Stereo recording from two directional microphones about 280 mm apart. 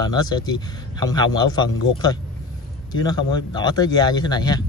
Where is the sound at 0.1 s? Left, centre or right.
Centre.